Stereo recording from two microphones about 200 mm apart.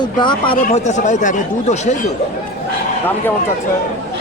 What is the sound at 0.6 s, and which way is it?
Speech, 35° left (ahead or behind).